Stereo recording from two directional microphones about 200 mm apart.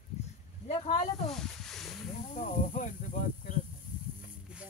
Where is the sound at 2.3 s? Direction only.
35° left (ahead or behind).